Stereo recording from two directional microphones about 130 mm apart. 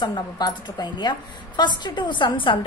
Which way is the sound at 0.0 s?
35° left (ahead or behind).